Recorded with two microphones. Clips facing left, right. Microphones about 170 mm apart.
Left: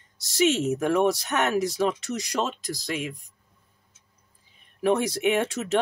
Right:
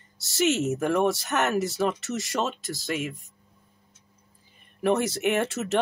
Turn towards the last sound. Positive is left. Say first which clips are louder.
# left 1 dB
turn(degrees=0)  # may be behind; listen again after turning